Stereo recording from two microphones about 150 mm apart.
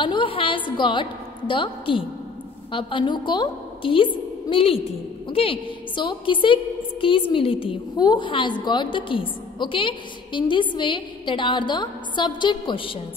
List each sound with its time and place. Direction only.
0.0 s a woman's voice: 35° left (ahead or behind)